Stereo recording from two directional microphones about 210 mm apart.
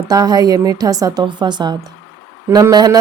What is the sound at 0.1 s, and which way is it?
A woman's voice, 20° right (ahead or behind).